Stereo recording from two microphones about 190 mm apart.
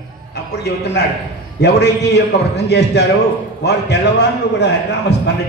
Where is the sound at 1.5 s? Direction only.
60° left (ahead or behind).